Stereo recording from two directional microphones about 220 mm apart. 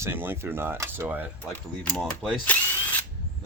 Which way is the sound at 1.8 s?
5° left (ahead or behind).